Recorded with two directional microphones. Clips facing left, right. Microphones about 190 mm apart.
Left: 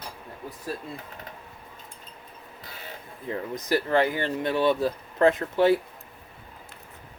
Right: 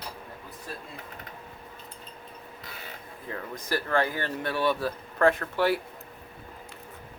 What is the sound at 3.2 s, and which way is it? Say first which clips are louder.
Speech: left 6 dB; 20° left (ahead or behind).